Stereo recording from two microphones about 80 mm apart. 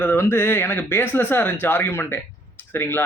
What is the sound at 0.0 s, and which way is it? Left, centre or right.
Speech, left.